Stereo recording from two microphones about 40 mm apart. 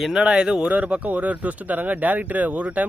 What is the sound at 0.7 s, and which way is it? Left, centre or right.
Speech, right.